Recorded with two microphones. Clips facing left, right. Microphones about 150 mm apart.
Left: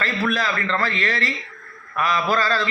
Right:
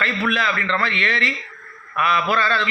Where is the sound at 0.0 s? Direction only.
40° left (ahead or behind).